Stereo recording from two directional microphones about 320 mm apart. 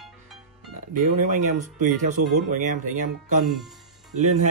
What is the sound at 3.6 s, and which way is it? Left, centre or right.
Music, centre.